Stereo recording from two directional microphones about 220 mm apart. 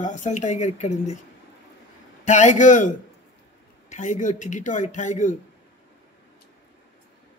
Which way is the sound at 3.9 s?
35° left (ahead or behind).